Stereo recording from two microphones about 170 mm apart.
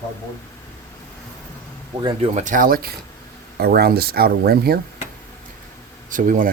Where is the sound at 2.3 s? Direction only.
50° right (ahead or behind); by 4.7 s 65° right (ahead or behind).